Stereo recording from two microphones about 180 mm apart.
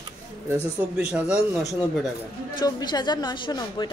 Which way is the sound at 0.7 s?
5° right (ahead or behind).